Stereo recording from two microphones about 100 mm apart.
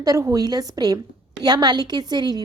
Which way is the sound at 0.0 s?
35° right (ahead or behind).